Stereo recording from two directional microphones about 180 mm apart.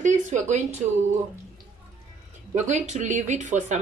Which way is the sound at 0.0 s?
40° right (ahead or behind).